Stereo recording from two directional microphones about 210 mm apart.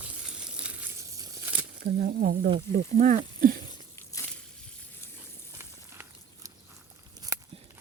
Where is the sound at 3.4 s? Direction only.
40° right (ahead or behind).